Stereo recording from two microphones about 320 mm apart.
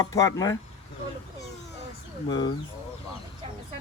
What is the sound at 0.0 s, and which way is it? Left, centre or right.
Speech, centre.